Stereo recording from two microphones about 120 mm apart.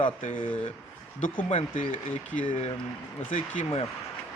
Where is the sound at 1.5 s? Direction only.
75° left (ahead or behind).